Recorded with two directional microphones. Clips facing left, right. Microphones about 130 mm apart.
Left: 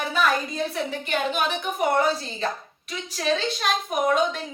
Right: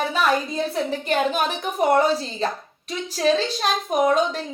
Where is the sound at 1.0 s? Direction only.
40° right (ahead or behind).